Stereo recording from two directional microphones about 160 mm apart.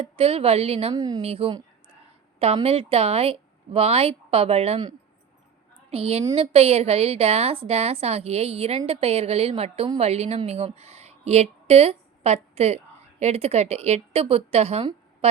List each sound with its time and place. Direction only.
0.0 s a woman's voice: 35° right (ahead or behind)
0.9 s speech: 25° right (ahead or behind)
1.2 s a woman's voice: 35° right (ahead or behind)
2.6 s a woman's voice: 40° right (ahead or behind)
5.9 s a woman's voice: 35° right (ahead or behind)